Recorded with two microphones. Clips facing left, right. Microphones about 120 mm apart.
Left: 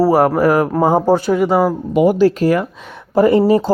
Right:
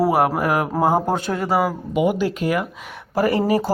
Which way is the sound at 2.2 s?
40° left (ahead or behind).